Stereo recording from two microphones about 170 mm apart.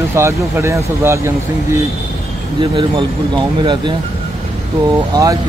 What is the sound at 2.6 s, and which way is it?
Speech, 30° right (ahead or behind).